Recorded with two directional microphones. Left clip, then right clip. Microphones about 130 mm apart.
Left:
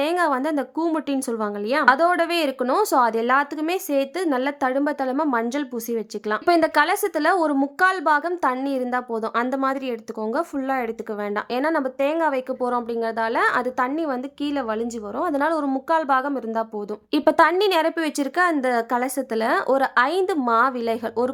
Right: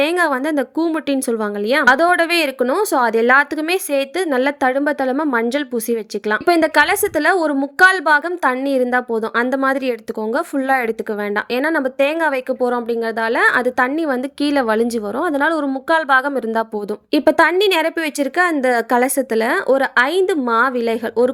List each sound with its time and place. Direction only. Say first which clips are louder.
0.0 s a woman's voice: right 4 dB; 20° right (ahead or behind); by 14.8 s 35° right (ahead or behind)
15.2 s a woman's voice: right 4 dB; 20° right (ahead or behind)
15.9 s a woman's voice: right 6 dB; 30° right (ahead or behind)
17.1 s a woman's voice: right 4 dB; 15° right (ahead or behind)